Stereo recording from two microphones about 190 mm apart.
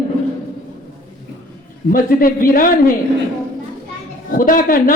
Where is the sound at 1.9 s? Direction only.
45° left (ahead or behind).